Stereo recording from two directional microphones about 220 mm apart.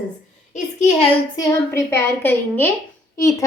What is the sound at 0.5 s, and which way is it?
Speech, 30° left (ahead or behind).